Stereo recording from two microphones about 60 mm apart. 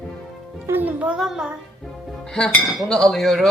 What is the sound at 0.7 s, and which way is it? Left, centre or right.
Music, right.